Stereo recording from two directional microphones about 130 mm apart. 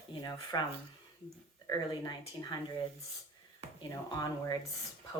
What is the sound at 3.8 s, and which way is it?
Speech, 30° left (ahead or behind).